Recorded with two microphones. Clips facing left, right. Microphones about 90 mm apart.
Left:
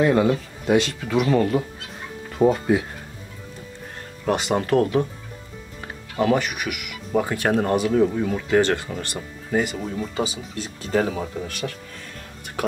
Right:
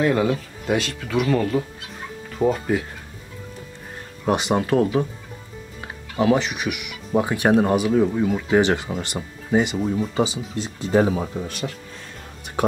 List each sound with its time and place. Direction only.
0.0 s speech: centre (ahead or behind)
4.3 s speech: 15° right (ahead or behind)
6.3 s speech: 20° right (ahead or behind)